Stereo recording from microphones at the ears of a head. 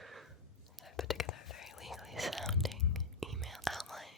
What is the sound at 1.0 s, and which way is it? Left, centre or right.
Whispering, left.